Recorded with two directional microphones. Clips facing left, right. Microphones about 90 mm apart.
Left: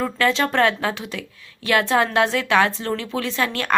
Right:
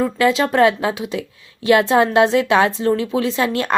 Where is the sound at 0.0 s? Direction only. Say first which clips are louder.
Right 4 dB; 10° right (ahead or behind).